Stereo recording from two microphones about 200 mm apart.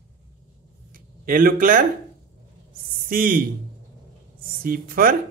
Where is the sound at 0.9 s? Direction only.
45° right (ahead or behind).